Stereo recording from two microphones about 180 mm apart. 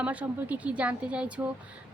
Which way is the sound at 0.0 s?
5° right (ahead or behind).